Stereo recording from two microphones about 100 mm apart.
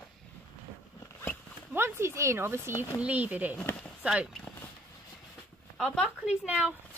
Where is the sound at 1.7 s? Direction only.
25° right (ahead or behind).